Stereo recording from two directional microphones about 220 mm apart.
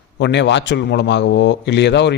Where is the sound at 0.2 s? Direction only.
55° left (ahead or behind).